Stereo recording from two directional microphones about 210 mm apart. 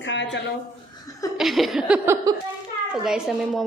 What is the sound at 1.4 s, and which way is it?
Speech, centre (ahead or behind).